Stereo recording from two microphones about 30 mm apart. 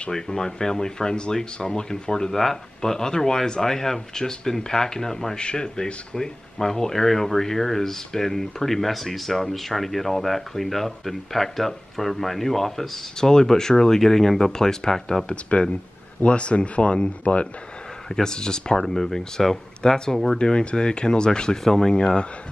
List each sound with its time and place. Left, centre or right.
0.1 s speech: left
2.3 s speech: centre
13.2 s speech: left
16.3 s speech: left
18.2 s speech: left
18.8 s speech: centre
19.8 s speech: centre
21.6 s speech: centre
21.9 s speech: left